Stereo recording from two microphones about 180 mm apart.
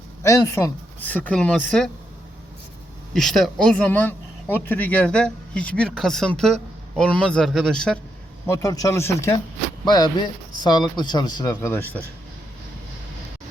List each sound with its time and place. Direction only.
0.2 s speech: 15° left (ahead or behind)
3.1 s speech: centre (ahead or behind)
8.4 s speech: 20° left (ahead or behind)